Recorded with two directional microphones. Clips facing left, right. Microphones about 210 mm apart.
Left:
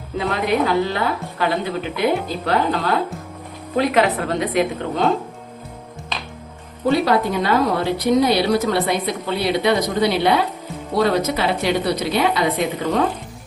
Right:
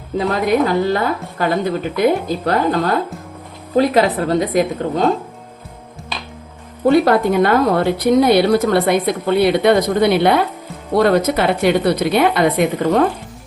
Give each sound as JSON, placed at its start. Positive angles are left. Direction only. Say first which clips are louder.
{"t": 0.2, "sound": "a woman's voice", "louder": "right 4 dB", "side_deg": -40}
{"t": 6.8, "sound": "a woman's voice", "louder": "right 5 dB", "side_deg": -50}